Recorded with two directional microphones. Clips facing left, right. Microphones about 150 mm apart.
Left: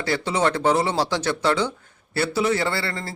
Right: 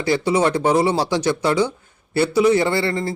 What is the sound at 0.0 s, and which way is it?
A man's voice, 15° right (ahead or behind).